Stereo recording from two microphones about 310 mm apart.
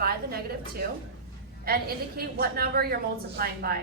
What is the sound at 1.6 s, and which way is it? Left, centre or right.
A woman's voice, right.